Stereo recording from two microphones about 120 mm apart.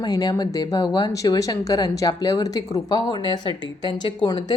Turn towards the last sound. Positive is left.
turn(degrees=35)  # may be behind; listen again after turning